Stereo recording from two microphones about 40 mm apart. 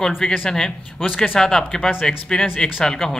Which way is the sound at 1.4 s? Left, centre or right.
Centre.